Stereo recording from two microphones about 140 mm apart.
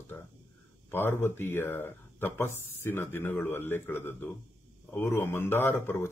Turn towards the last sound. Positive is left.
turn(degrees=15)  # may be behind; listen again after turning